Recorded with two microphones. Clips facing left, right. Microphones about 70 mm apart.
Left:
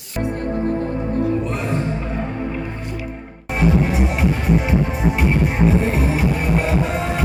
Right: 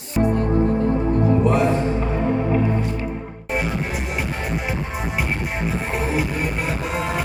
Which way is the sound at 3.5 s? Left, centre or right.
Centre.